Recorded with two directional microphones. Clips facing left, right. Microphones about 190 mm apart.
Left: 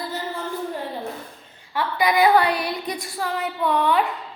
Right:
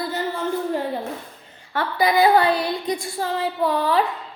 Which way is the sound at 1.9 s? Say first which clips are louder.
Right 1 dB; 30° right (ahead or behind).